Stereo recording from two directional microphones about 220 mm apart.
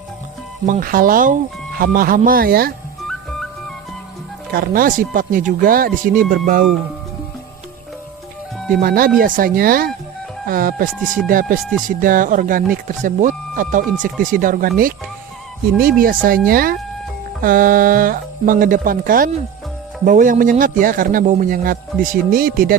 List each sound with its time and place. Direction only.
0.7 s speech: 40° right (ahead or behind)
4.5 s speech: 40° right (ahead or behind)
8.5 s music: centre (ahead or behind)
8.8 s speech: 40° right (ahead or behind)
15.8 s speech: 40° right (ahead or behind)